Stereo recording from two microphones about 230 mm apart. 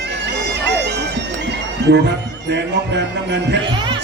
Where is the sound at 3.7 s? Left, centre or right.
Right.